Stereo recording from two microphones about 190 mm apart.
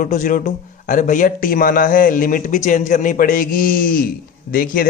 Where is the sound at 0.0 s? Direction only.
45° left (ahead or behind).